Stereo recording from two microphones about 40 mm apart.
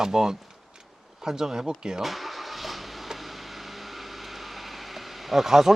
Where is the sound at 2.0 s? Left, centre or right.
Centre.